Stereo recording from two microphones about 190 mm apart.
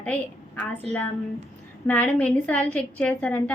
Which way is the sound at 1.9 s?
5° left (ahead or behind).